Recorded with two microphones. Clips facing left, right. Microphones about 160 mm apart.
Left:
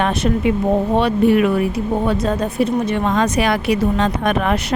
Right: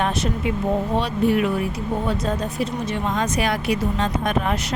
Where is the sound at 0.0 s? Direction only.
65° left (ahead or behind).